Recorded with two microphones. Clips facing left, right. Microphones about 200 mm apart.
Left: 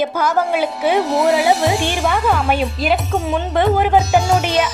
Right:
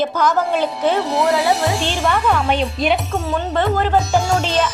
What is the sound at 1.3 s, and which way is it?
Speech, 15° left (ahead or behind).